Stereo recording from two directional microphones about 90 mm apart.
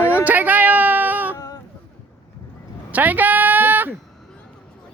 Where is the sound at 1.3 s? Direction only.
40° left (ahead or behind).